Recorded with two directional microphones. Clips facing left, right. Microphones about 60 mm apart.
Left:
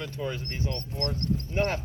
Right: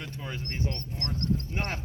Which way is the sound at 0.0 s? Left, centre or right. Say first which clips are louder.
Left 5 dB; right.